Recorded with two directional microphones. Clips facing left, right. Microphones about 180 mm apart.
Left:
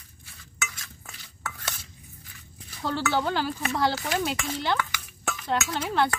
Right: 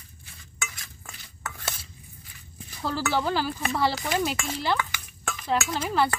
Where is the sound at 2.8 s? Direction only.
Centre (ahead or behind).